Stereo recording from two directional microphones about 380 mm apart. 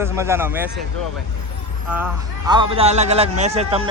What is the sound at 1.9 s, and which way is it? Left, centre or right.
Speech, centre.